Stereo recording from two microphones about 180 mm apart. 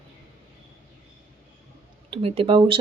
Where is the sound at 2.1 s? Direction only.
30° right (ahead or behind).